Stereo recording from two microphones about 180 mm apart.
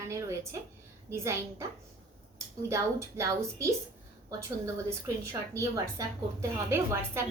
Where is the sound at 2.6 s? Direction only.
15° right (ahead or behind).